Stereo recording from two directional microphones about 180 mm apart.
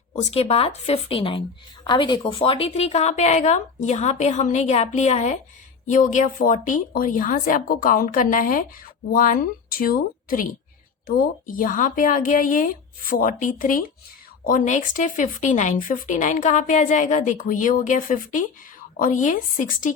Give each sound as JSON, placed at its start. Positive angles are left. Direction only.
{"t": 0.2, "sound": "a woman's voice", "side_deg": 35}